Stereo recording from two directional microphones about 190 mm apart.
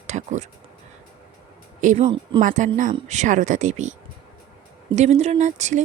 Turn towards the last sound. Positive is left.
turn(degrees=-40)  # may be behind; listen again after turning